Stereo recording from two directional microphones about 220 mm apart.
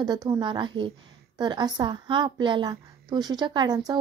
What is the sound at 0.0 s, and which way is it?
A woman's voice, 20° right (ahead or behind).